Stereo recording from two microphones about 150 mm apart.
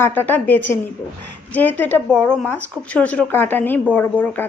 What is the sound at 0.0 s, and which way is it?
A woman's voice, 15° left (ahead or behind).